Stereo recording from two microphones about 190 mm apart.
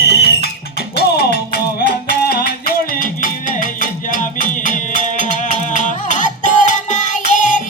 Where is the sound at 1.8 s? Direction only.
50° left (ahead or behind).